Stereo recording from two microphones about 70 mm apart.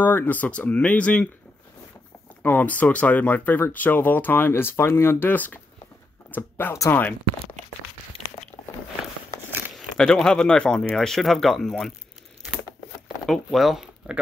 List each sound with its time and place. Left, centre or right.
0.0 s speech: left
2.4 s speech: left
9.9 s speech: centre
13.3 s speech: centre
14.0 s speech: centre